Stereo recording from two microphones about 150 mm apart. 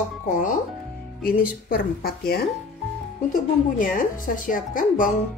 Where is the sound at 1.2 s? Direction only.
75° left (ahead or behind).